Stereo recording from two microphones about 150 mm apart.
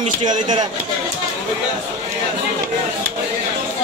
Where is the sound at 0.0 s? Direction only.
55° right (ahead or behind).